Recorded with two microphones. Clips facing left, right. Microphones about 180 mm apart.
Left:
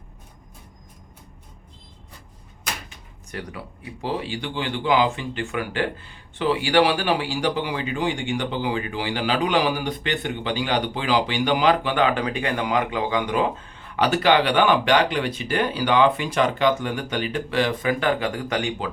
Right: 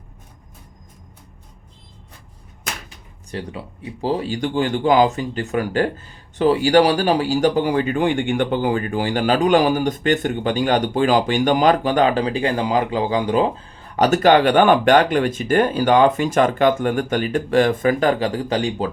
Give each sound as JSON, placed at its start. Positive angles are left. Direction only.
{"t": 3.3, "sound": "speech", "side_deg": -30}